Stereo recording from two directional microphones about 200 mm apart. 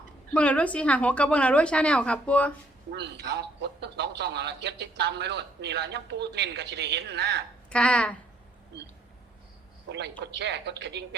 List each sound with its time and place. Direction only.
0.3 s a woman's voice: 5° left (ahead or behind)
2.9 s speech: 60° right (ahead or behind)
7.7 s speech: 5° left (ahead or behind)
9.9 s speech: 60° right (ahead or behind)